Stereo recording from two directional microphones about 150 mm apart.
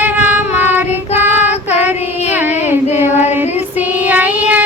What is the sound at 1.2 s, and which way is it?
Child singing, 45° left (ahead or behind).